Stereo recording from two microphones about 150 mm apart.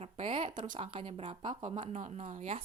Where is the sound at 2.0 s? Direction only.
50° right (ahead or behind).